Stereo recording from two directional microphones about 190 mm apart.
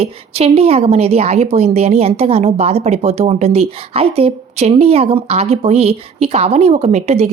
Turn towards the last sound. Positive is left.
turn(degrees=-35)  # may be behind; listen again after turning